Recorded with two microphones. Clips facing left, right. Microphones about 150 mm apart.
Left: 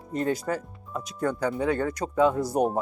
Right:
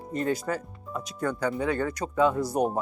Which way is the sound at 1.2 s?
25° left (ahead or behind).